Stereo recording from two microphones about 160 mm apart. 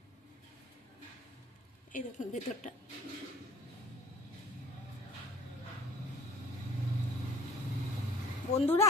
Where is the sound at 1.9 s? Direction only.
50° left (ahead or behind).